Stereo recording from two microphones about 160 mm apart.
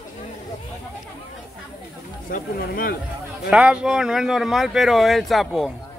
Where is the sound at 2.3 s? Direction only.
65° left (ahead or behind).